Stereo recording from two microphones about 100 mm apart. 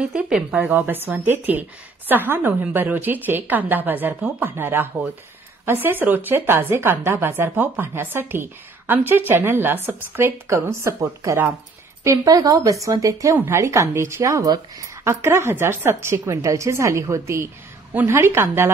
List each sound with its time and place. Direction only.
0.0 s a woman's voice: 10° right (ahead or behind); by 18.7 s 25° right (ahead or behind)